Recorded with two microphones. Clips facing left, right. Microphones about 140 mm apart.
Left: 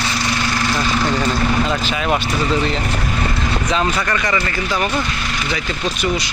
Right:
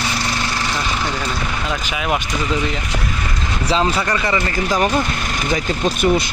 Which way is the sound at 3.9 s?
20° right (ahead or behind).